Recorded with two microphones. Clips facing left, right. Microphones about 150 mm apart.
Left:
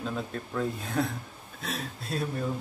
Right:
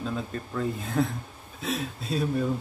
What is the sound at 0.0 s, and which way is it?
Speech, centre (ahead or behind).